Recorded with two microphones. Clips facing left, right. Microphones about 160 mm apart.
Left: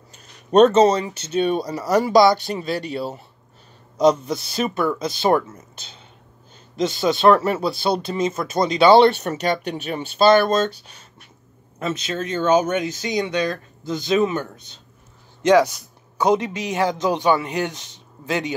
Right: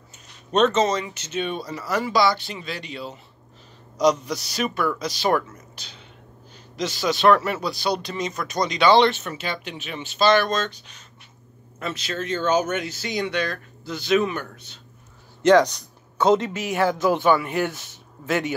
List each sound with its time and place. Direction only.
0.5 s speech: 35° left (ahead or behind)
6.8 s speech: 25° left (ahead or behind); by 10.0 s 45° left (ahead or behind)
10.1 s speech: 30° left (ahead or behind)
11.8 s speech: 20° left (ahead or behind)
15.4 s a man's voice: 10° left (ahead or behind)